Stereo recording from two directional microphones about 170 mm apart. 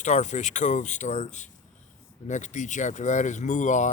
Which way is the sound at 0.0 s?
45° left (ahead or behind).